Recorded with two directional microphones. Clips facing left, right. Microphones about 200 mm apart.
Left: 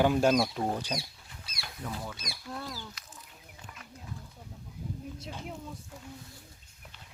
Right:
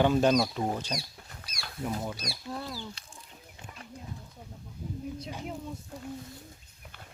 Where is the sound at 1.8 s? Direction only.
25° right (ahead or behind).